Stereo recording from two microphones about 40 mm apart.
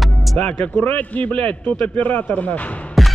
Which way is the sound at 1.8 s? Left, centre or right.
Left.